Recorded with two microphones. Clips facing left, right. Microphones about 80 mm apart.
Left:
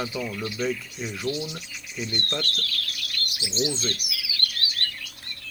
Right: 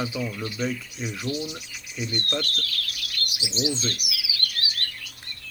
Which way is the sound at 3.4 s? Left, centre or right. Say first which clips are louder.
Even; centre.